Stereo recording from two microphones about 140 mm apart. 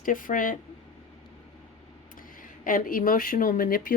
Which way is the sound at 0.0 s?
75° left (ahead or behind).